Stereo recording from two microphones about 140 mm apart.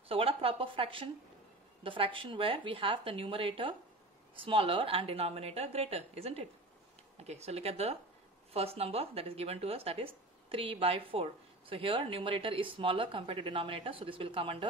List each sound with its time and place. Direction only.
0.1 s a woman's voice: 40° right (ahead or behind)